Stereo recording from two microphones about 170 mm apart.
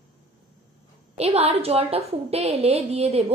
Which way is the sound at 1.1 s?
35° right (ahead or behind).